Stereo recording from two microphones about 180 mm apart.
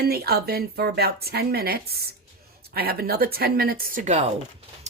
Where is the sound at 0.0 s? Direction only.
60° right (ahead or behind).